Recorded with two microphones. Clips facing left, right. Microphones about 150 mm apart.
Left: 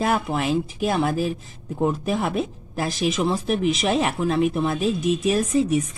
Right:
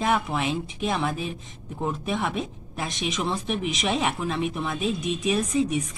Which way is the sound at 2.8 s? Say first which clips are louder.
Left 6 dB; 5° left (ahead or behind).